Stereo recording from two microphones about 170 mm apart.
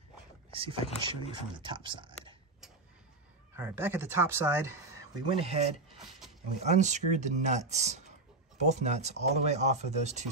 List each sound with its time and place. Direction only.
0.5 s speech: 35° right (ahead or behind)
3.5 s speech: 15° right (ahead or behind)
5.3 s speech: 35° right (ahead or behind)